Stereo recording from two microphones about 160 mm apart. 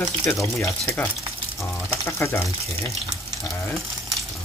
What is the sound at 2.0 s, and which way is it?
Speech, 15° left (ahead or behind).